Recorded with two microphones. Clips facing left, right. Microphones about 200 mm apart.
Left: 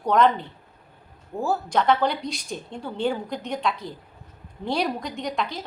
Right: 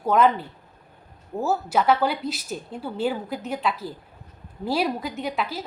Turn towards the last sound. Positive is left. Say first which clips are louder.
# even
turn(degrees=-5)  # may be behind; listen again after turning